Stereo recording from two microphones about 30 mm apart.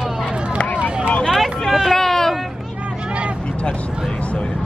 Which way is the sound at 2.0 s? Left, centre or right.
Centre.